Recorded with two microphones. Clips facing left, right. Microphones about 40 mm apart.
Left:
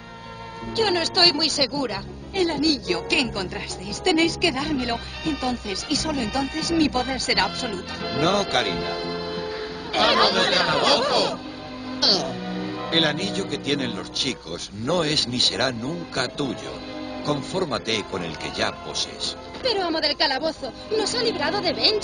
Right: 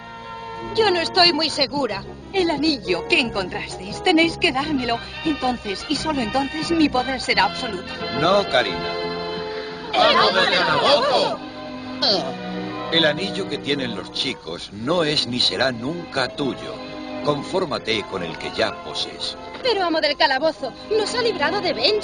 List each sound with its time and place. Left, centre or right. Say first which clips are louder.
0.7 s speech: right 4 dB; right
17.6 s speech: right 2 dB; centre